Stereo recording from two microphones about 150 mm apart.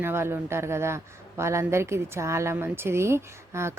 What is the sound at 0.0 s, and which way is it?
Speech, 15° right (ahead or behind).